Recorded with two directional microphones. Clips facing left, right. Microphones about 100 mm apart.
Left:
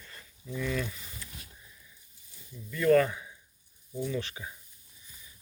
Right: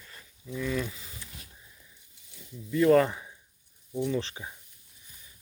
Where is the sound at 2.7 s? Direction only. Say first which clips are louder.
Right 2 dB; 30° right (ahead or behind).